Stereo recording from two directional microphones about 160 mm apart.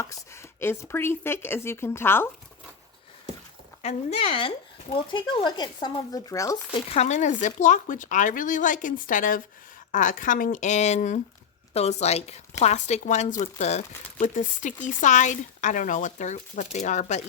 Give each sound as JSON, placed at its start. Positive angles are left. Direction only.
{"t": 0.6, "sound": "speech", "side_deg": 15}
{"t": 3.8, "sound": "speech", "side_deg": 35}
{"t": 6.8, "sound": "a woman's voice", "side_deg": 45}